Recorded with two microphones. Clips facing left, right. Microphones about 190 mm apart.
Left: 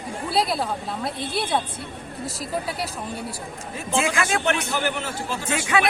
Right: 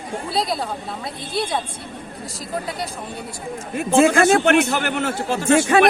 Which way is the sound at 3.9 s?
50° right (ahead or behind).